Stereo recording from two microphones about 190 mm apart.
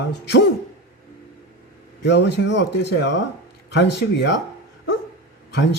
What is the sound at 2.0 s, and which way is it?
Speech, 65° left (ahead or behind).